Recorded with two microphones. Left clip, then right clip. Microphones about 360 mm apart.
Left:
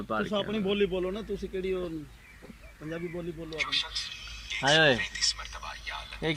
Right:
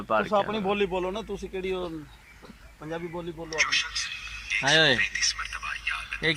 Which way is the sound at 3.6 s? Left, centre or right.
Centre.